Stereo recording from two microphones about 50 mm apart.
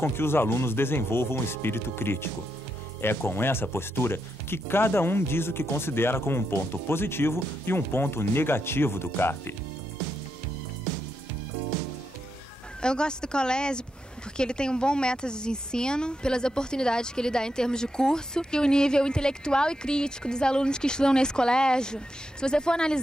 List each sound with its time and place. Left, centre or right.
0.1 s speech: left
12.8 s speech: centre